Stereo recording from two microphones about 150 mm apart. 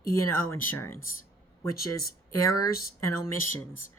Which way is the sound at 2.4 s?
20° left (ahead or behind).